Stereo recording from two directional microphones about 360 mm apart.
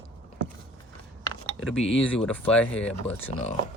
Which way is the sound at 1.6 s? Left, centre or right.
Centre.